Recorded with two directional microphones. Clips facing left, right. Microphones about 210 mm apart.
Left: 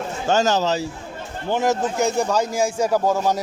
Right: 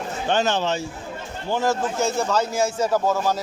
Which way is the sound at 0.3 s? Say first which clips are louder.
Left 3 dB; 40° left (ahead or behind).